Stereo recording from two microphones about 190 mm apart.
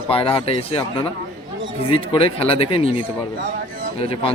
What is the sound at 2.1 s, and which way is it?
A man's voice, 30° left (ahead or behind).